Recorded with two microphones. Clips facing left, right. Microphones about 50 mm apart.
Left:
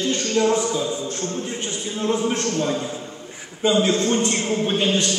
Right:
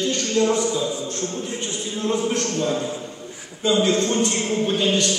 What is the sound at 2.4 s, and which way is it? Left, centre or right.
Speech, left.